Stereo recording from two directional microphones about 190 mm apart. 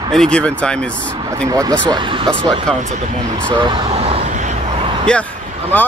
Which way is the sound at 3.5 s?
25° right (ahead or behind).